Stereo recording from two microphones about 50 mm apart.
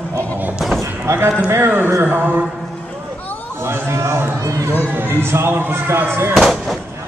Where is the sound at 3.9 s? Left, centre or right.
Right.